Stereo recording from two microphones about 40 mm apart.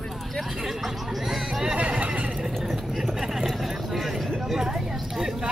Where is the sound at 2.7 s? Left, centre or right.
Centre.